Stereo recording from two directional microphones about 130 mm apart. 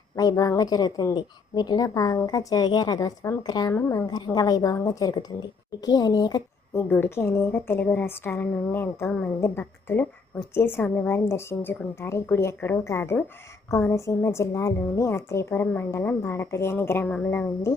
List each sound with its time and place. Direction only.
0.2 s a woman's voice: 25° left (ahead or behind)
3.7 s a woman's voice: 20° left (ahead or behind)
6.7 s a woman's voice: 15° left (ahead or behind)